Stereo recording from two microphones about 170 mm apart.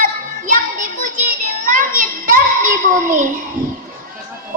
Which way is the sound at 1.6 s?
55° right (ahead or behind).